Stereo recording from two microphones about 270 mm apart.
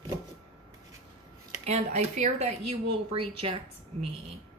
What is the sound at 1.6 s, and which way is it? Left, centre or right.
A woman's voice, right.